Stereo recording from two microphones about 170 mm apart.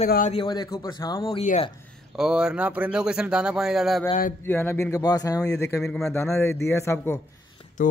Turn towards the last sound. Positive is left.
turn(degrees=50)  # may be behind; listen again after turning